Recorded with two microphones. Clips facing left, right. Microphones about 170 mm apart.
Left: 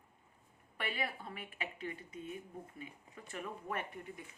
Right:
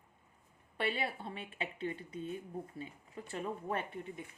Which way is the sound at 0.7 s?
30° right (ahead or behind).